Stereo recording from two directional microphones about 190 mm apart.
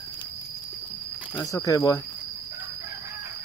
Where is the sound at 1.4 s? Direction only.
15° left (ahead or behind).